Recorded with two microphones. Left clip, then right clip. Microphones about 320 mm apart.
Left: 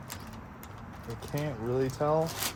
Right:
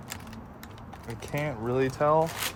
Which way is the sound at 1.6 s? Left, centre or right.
Centre.